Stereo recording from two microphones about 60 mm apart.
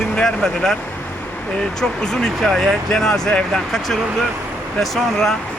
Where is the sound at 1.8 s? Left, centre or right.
Centre.